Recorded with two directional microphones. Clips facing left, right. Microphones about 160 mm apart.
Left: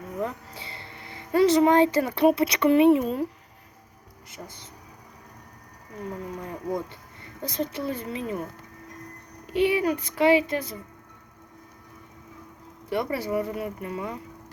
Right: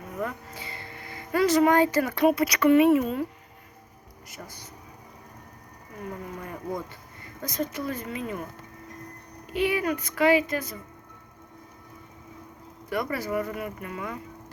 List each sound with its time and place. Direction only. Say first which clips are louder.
0.2 s speech: left 1 dB; 30° left (ahead or behind)
4.3 s speech: left 1 dB; 25° left (ahead or behind)
6.4 s speech: left 3 dB; 20° left (ahead or behind)
7.4 s speech: left 1 dB; 30° left (ahead or behind)
9.5 s speech: left 3 dB; 30° left (ahead or behind)
12.9 s speech: left 2 dB; 30° left (ahead or behind)